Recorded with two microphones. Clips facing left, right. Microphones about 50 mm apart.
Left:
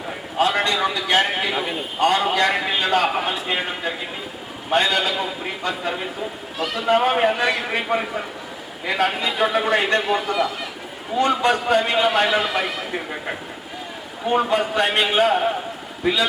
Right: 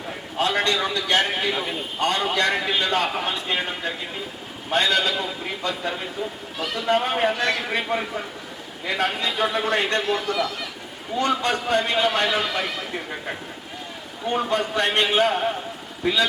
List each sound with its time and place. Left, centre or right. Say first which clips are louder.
0.3 s a man's voice: left 2 dB; centre